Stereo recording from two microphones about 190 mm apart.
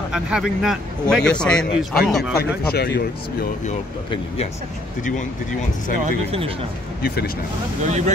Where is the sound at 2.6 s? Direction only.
55° left (ahead or behind).